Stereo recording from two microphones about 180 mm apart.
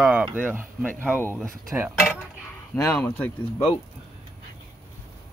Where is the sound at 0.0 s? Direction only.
Centre (ahead or behind).